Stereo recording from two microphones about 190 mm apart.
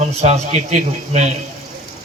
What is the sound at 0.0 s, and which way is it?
A man's voice, 35° right (ahead or behind).